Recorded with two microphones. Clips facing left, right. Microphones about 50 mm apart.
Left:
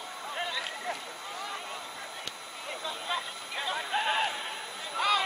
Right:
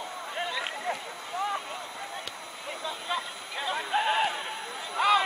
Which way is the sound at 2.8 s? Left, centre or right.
Centre.